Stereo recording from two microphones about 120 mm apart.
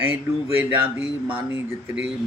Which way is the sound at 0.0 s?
15° right (ahead or behind).